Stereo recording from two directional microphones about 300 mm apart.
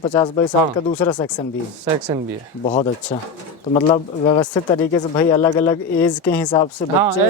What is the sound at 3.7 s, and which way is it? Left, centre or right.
Speech, centre.